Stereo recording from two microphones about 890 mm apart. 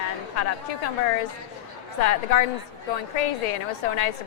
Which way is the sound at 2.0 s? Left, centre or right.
Left.